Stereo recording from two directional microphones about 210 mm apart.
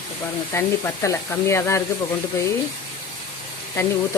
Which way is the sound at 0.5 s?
15° left (ahead or behind).